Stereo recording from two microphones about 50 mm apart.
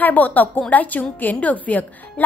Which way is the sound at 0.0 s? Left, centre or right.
Left.